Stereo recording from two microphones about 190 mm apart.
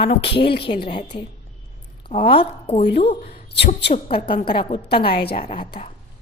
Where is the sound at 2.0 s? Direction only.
25° left (ahead or behind).